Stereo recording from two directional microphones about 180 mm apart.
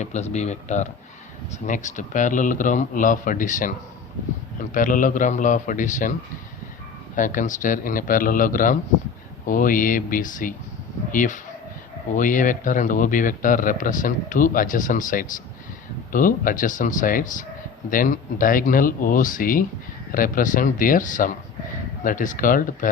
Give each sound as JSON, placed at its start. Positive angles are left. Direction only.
{"t": 0.0, "sound": "a man's voice", "side_deg": 40}
{"t": 4.7, "sound": "a man's voice", "side_deg": 50}
{"t": 7.2, "sound": "a man's voice", "side_deg": 45}